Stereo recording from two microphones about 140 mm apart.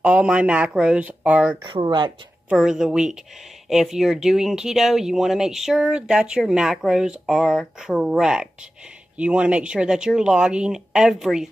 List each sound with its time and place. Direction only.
0.0 s a woman's voice: 10° right (ahead or behind)
1.6 s speech: 35° right (ahead or behind)
2.5 s speech: 5° right (ahead or behind)